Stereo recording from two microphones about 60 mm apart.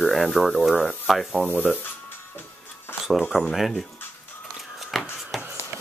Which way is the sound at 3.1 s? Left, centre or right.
Centre.